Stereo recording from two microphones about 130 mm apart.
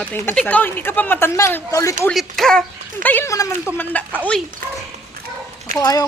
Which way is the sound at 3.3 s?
25° left (ahead or behind).